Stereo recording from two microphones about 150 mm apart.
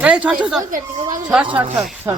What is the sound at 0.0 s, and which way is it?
Speech, 5° right (ahead or behind).